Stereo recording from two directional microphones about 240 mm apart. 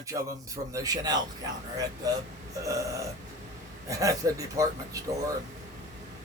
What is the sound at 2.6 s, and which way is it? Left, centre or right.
Speech, centre.